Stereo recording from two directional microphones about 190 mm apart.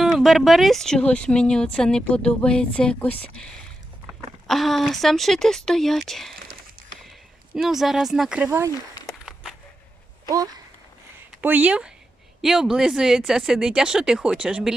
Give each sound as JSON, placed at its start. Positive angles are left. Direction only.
{"t": 0.0, "sound": "speech", "side_deg": 0}
{"t": 7.5, "sound": "speech", "side_deg": 0}
{"t": 9.0, "sound": "a sound", "side_deg": 0}
{"t": 10.2, "sound": "speech", "side_deg": -20}
{"t": 11.3, "sound": "speech", "side_deg": -10}